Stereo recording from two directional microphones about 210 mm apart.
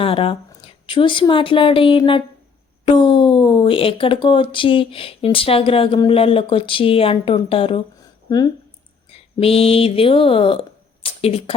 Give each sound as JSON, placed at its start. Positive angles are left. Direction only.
{"t": 0.0, "sound": "speech", "side_deg": 25}
{"t": 9.0, "sound": "speech", "side_deg": 25}